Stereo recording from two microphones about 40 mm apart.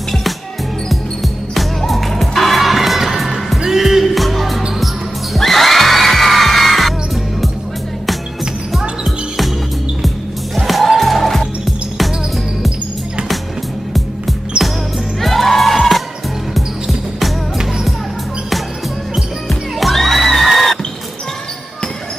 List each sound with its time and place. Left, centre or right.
1.5 s music: centre
10.0 s music: centre
15.1 s music: centre
19.1 s music: centre
20.4 s a sound: centre